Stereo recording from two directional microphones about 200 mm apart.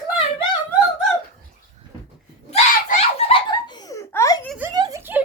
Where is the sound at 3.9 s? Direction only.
15° left (ahead or behind).